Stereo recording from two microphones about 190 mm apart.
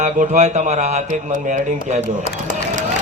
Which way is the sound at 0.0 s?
40° right (ahead or behind).